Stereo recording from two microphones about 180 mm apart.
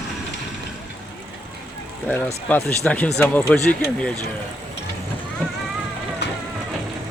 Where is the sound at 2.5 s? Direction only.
10° left (ahead or behind).